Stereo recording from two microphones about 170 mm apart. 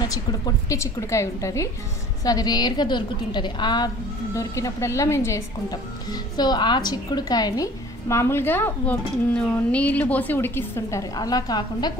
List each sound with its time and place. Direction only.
0.1 s a woman's voice: 20° left (ahead or behind)